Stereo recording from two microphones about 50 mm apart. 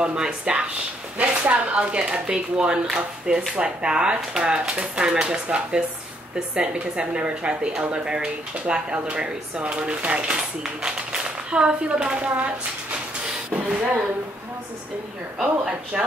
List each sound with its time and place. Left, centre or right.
0.0 s a woman's voice: right
13.7 s a woman's voice: right
15.4 s speech: centre